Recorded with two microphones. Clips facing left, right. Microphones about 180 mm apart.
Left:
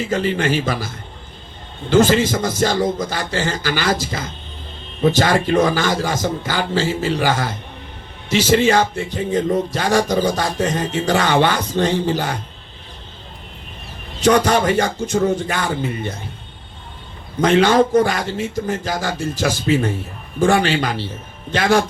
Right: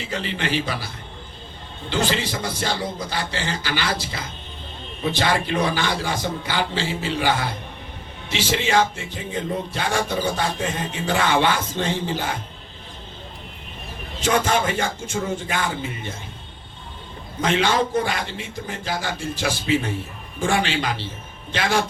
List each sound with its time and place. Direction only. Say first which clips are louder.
0.1 s speech: left 6 dB; 45° left (ahead or behind)
1.9 s speech: left 10 dB; 45° left (ahead or behind)
9.1 s music: left 9 dB; 40° left (ahead or behind)
14.3 s music: left 1 dB; 40° left (ahead or behind)
17.4 s speech: left 7 dB; 45° left (ahead or behind)